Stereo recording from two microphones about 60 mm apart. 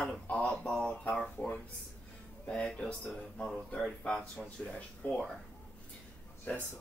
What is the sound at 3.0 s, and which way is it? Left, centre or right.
Speech, centre.